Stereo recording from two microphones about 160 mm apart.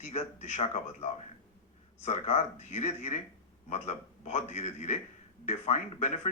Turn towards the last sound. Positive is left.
turn(degrees=45)  # may be behind; listen again after turning